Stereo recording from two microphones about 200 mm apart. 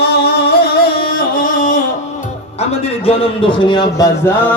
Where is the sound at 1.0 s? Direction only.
45° left (ahead or behind).